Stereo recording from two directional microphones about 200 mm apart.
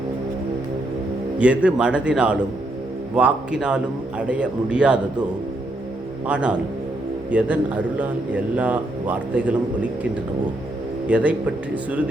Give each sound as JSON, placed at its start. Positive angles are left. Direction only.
{"t": 1.4, "sound": "a man's voice", "side_deg": -5}
{"t": 6.2, "sound": "a man's voice", "side_deg": -5}
{"t": 11.1, "sound": "a man's voice", "side_deg": -5}